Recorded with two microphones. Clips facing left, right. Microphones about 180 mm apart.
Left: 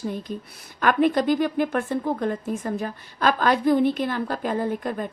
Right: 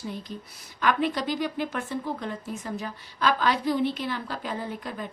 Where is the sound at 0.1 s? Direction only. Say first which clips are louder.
Left 6 dB; 50° left (ahead or behind).